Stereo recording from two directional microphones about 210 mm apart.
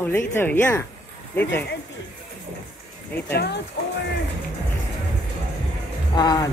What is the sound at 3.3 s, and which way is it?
Speech, 50° left (ahead or behind).